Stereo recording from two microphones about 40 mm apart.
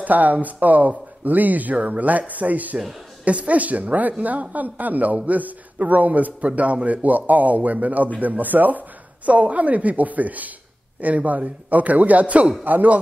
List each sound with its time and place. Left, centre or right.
0.0 s a man's voice: right